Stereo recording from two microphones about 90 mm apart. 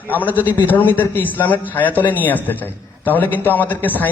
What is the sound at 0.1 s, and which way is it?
A man's voice, 20° left (ahead or behind).